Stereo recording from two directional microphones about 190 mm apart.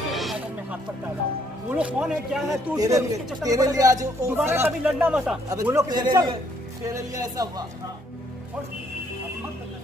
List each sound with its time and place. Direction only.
0.1 s a sound: centre (ahead or behind)
1.8 s speech: 5° right (ahead or behind)
2.5 s a man's voice: 20° right (ahead or behind)